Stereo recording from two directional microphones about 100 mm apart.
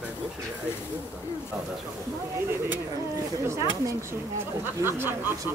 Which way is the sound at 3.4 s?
30° right (ahead or behind).